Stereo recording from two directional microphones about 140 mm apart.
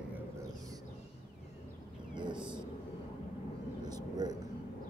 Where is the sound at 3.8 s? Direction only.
30° right (ahead or behind).